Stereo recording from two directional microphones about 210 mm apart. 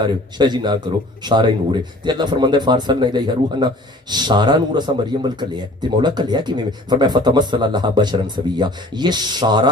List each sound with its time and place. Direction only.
0.0 s a man's voice: 20° right (ahead or behind)